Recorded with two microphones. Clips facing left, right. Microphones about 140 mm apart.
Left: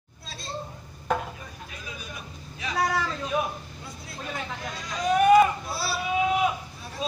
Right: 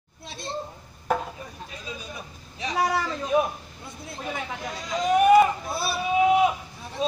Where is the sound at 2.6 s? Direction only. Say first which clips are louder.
Right 2 dB; 20° right (ahead or behind).